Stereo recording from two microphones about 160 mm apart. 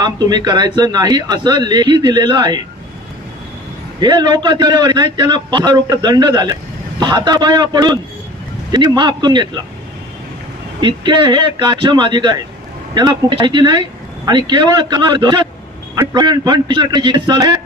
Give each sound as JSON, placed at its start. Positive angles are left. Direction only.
{"t": 0.0, "sound": "a man's voice", "side_deg": -25}
{"t": 4.0, "sound": "a man's voice", "side_deg": -30}
{"t": 10.8, "sound": "a man's voice", "side_deg": -30}